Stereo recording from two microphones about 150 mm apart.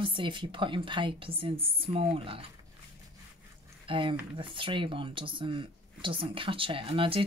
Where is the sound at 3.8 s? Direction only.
35° right (ahead or behind).